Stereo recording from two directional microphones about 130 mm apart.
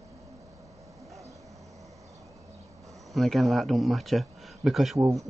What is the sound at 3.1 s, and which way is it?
Speech, centre (ahead or behind).